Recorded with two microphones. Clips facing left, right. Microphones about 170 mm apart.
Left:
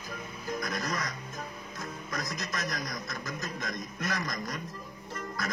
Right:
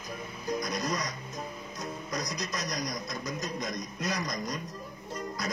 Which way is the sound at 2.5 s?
20° right (ahead or behind).